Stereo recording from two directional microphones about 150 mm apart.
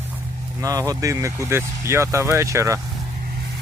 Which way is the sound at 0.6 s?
25° right (ahead or behind).